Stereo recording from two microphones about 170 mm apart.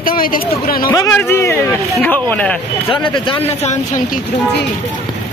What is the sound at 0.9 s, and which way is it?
Speech, 15° left (ahead or behind).